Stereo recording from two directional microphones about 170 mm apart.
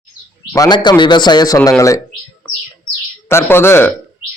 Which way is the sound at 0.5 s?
25° left (ahead or behind).